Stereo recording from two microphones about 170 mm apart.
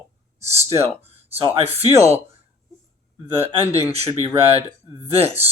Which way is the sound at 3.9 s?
35° right (ahead or behind).